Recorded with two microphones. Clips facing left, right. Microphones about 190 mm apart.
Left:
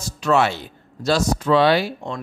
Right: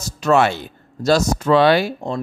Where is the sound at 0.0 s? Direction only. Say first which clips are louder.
Right 3 dB; 45° right (ahead or behind).